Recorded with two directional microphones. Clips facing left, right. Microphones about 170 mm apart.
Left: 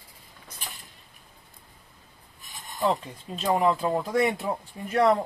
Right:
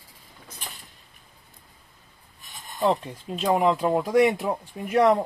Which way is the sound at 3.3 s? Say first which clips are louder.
Right 2 dB; 15° right (ahead or behind).